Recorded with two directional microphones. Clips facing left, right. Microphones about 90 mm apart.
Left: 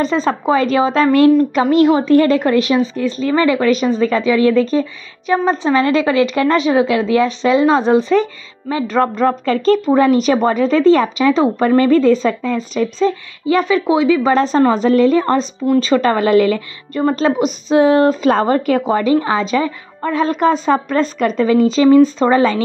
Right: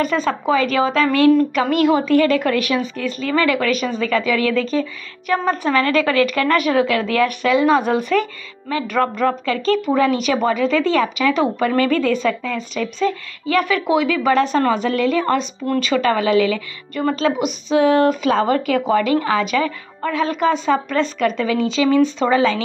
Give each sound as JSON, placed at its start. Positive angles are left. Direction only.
{"t": 0.0, "sound": "a woman's voice", "side_deg": 30}
{"t": 5.2, "sound": "a woman's voice", "side_deg": 20}